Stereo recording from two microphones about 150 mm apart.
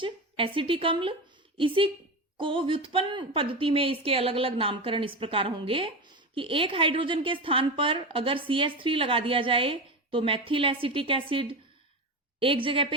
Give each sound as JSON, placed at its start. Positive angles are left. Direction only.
{"t": 0.0, "sound": "a woman's voice", "side_deg": -35}